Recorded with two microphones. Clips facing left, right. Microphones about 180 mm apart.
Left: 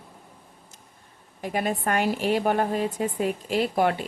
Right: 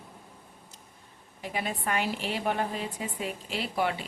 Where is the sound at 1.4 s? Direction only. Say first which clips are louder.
Left 7 dB; 50° left (ahead or behind).